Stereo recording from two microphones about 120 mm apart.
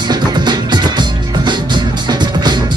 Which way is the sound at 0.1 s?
35° right (ahead or behind).